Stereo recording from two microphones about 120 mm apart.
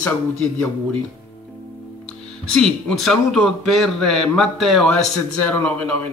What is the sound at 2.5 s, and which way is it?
A man's voice, 5° left (ahead or behind).